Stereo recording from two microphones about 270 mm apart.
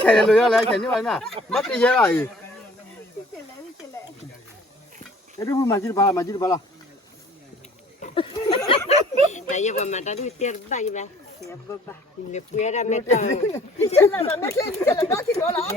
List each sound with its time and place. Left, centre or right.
0.0 s speech: centre
5.4 s speech: centre
8.0 s a sound: centre
9.3 s speech: left
12.3 s speech: left
13.8 s speech: centre